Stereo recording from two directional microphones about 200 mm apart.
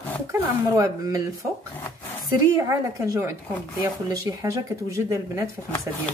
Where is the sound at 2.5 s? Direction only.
15° right (ahead or behind).